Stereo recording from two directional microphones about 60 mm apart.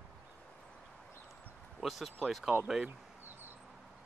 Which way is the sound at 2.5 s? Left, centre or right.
Right.